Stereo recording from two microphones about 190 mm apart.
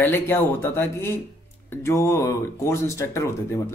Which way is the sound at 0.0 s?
10° left (ahead or behind).